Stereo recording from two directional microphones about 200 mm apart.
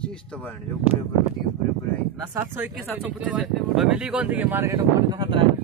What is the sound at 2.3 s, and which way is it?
Speech, 10° right (ahead or behind).